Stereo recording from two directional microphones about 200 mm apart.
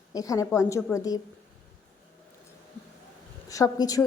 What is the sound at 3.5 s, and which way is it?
Speech, 15° left (ahead or behind).